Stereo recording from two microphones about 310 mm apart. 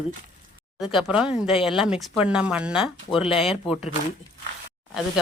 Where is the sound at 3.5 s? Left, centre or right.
Centre.